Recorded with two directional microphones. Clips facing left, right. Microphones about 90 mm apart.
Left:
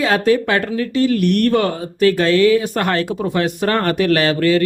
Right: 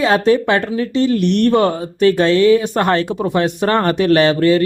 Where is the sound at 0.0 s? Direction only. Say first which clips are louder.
Right 2 dB; 25° right (ahead or behind).